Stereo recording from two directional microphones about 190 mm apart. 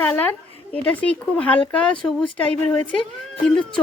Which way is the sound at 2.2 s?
25° left (ahead or behind).